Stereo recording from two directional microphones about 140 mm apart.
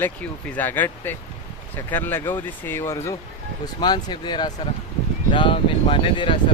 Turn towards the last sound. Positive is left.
turn(degrees=35)  # may be behind; listen again after turning